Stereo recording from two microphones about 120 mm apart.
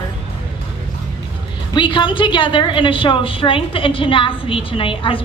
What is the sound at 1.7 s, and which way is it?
A woman's voice, 45° left (ahead or behind).